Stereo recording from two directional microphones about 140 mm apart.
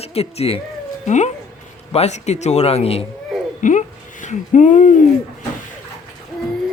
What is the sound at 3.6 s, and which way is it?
Speech, 65° left (ahead or behind).